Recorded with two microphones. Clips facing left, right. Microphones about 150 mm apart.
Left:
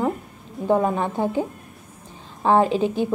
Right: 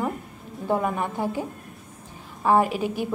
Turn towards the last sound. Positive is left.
turn(degrees=25)  # may be behind; listen again after turning